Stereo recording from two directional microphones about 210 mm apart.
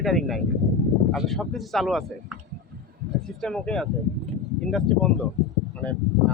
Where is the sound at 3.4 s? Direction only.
5° left (ahead or behind).